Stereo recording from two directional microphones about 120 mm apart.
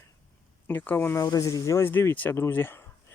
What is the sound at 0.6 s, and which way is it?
Speech, 15° left (ahead or behind).